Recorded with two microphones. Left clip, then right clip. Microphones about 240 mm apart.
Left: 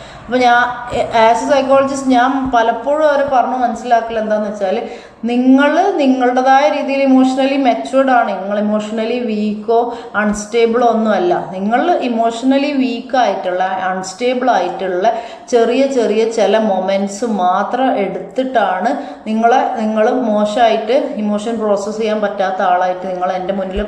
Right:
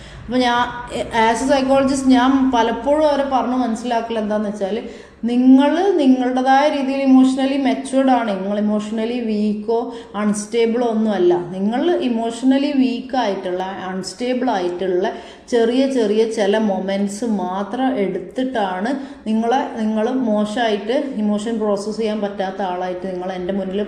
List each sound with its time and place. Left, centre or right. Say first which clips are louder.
0.3 s a woman's voice: left 6 dB; right
18.3 s a woman's voice: left 8 dB; right